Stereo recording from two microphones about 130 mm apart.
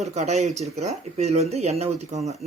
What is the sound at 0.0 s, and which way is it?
Speech, 60° right (ahead or behind).